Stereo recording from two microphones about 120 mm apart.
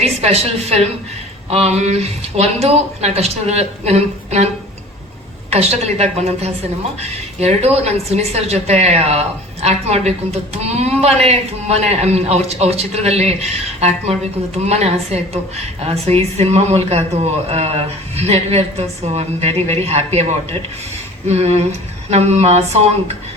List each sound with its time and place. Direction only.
0.0 s a woman's voice: 60° right (ahead or behind)
5.5 s a woman's voice: 60° right (ahead or behind)
21.2 s a woman's voice: 60° right (ahead or behind)